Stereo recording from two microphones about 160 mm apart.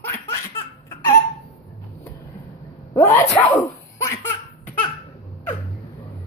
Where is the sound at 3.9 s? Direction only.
20° left (ahead or behind).